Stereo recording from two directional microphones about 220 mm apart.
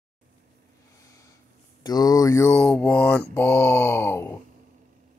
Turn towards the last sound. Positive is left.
turn(degrees=10)  # may be behind; listen again after turning